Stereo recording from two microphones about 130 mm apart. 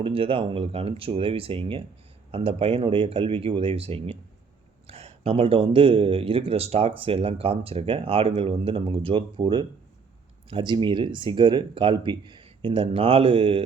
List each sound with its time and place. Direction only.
0.0 s a man's voice: 45° right (ahead or behind)